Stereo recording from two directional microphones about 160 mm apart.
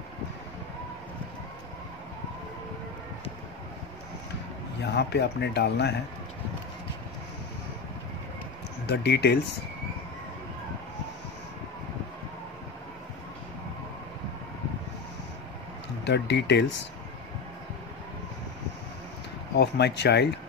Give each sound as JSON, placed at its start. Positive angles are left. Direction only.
{"t": 4.8, "sound": "speech", "side_deg": 90}
{"t": 8.8, "sound": "speech", "side_deg": 90}
{"t": 16.0, "sound": "speech", "side_deg": 90}
{"t": 19.5, "sound": "speech", "side_deg": 90}